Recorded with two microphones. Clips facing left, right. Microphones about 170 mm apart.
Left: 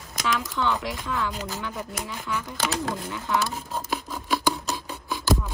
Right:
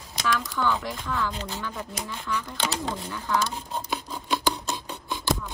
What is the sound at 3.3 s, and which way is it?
Filing, 5° left (ahead or behind).